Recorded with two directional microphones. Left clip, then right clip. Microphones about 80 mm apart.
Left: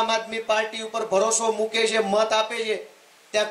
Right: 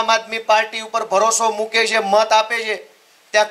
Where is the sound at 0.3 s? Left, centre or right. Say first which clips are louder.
Right 7 dB; right.